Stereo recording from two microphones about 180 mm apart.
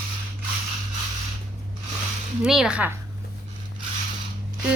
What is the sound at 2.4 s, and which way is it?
Speech, 5° right (ahead or behind).